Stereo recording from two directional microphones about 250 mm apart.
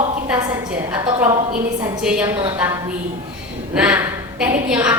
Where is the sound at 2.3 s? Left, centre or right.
Centre.